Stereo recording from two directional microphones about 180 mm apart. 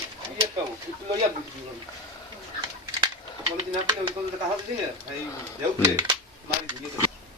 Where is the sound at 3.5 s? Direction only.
25° right (ahead or behind).